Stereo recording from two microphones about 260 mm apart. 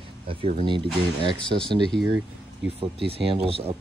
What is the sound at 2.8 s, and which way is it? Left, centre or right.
Speech, right.